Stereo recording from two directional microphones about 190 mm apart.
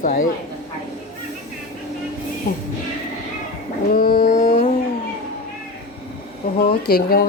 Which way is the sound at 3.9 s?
50° left (ahead or behind).